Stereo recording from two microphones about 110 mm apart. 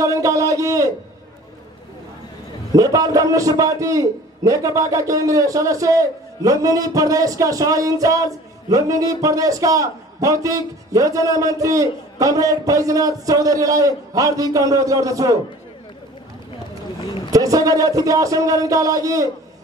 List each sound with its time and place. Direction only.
0.0 s a man's voice: 30° right (ahead or behind)
2.7 s a man's voice: 30° right (ahead or behind)
17.3 s a man's voice: 30° right (ahead or behind)